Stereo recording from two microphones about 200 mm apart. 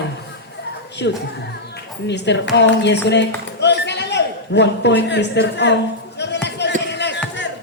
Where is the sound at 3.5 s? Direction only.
60° left (ahead or behind).